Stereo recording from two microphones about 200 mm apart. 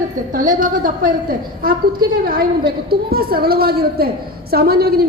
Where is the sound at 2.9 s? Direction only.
50° right (ahead or behind).